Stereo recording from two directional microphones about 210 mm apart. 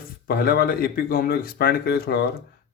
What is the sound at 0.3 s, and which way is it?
Speech, 45° left (ahead or behind).